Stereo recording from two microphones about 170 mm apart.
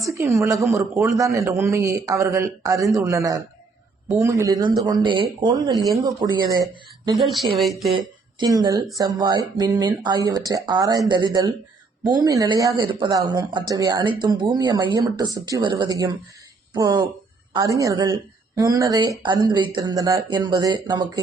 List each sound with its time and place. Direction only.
0.0 s a man's voice: 15° right (ahead or behind)
7.2 s speech: centre (ahead or behind)
7.9 s speech: 25° right (ahead or behind)